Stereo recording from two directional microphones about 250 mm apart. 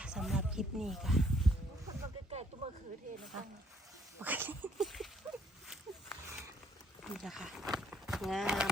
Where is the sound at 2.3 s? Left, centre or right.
Right.